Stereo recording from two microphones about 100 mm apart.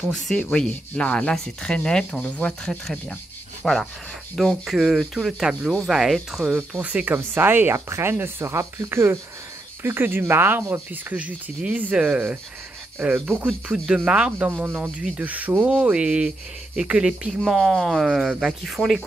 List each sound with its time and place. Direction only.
0.1 s speech: 5° left (ahead or behind)
6.5 s speech: 15° right (ahead or behind)